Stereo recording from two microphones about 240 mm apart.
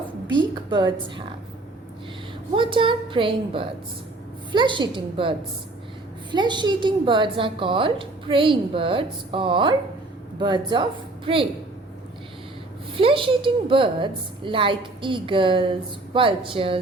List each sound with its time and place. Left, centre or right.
0.3 s a woman's voice: centre
2.6 s a woman's voice: right
6.3 s a woman's voice: centre
13.0 s a woman's voice: right